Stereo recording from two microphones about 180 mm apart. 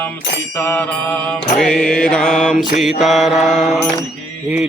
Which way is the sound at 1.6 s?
5° left (ahead or behind).